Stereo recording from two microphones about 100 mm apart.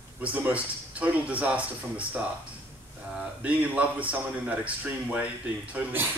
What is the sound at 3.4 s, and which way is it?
Speech, 15° right (ahead or behind).